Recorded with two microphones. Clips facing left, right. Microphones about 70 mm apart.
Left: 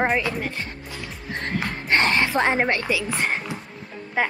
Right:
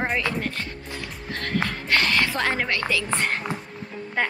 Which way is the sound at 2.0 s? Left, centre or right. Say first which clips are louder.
Left 3 dB; left.